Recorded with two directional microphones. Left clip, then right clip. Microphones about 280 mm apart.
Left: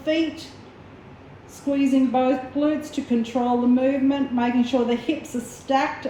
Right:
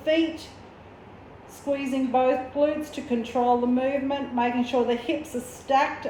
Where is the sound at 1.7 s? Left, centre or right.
Centre.